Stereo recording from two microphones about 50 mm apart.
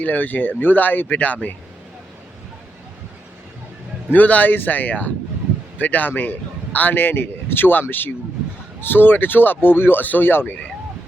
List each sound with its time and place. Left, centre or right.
0.0 s speech: left
4.1 s speech: left